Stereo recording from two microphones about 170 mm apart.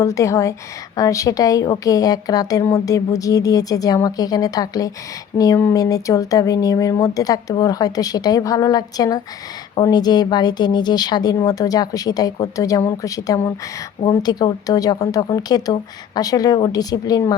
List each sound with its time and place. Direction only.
0.0 s a woman's voice: 20° left (ahead or behind)